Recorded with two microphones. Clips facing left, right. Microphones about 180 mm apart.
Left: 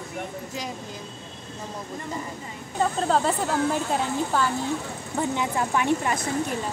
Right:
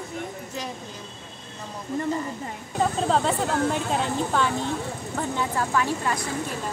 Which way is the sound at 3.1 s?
Centre (ahead or behind).